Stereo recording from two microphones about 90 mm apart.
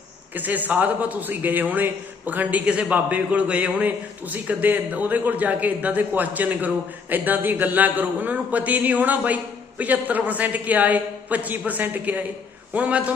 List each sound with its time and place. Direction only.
0.3 s a man's voice: 20° right (ahead or behind)